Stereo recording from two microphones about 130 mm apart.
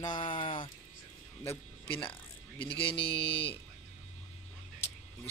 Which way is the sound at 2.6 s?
40° left (ahead or behind).